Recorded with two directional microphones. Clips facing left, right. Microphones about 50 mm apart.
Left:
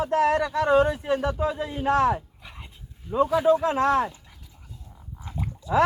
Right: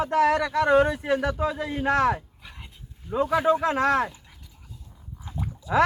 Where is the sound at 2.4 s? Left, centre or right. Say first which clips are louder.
Left 1 dB; centre.